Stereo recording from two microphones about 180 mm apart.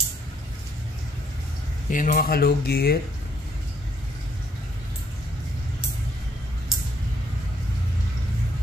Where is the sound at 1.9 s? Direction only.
45° left (ahead or behind).